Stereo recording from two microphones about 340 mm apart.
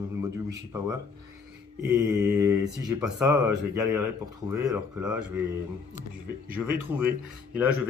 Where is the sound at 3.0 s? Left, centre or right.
Centre.